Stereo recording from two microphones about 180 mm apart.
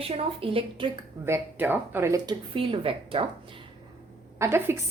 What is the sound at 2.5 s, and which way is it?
Speech, 30° right (ahead or behind).